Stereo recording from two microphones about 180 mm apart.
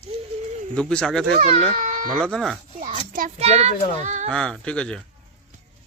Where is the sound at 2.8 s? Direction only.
45° right (ahead or behind).